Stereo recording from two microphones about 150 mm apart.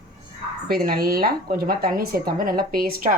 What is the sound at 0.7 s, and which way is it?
Speech, 80° right.